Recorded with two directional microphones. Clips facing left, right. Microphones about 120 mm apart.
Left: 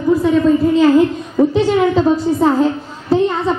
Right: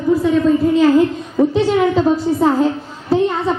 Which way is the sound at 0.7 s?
30° left (ahead or behind).